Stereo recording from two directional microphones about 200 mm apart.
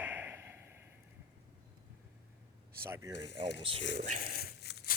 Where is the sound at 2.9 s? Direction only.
15° right (ahead or behind).